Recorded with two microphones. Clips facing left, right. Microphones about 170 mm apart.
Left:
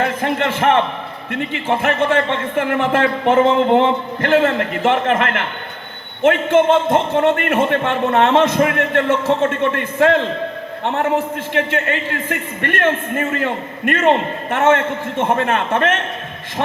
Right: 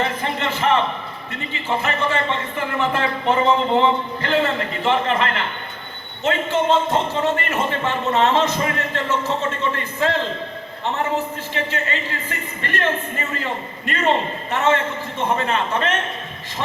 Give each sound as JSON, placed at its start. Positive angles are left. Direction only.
{"t": 0.0, "sound": "a man's voice", "side_deg": 55}
{"t": 11.5, "sound": "a man's voice", "side_deg": 60}